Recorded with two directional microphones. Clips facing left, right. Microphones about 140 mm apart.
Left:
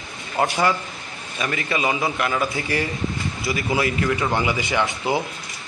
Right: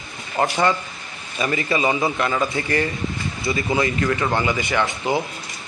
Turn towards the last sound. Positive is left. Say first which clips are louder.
# right 1 dB
turn(degrees=10)  # may be behind; listen again after turning